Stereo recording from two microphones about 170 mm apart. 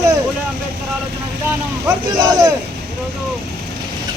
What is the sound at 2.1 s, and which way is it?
Speech, 25° right (ahead or behind).